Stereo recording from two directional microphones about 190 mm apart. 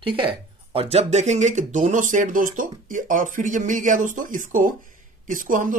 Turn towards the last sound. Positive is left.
turn(degrees=-45)  # may be behind; listen again after turning